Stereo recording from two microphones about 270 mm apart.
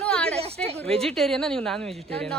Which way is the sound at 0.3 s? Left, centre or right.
Right.